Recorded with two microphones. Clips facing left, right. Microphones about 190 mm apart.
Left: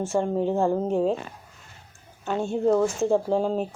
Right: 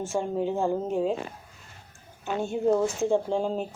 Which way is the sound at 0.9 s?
35° left (ahead or behind).